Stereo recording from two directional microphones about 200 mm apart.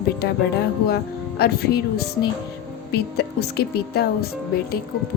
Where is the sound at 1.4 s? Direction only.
50° left (ahead or behind).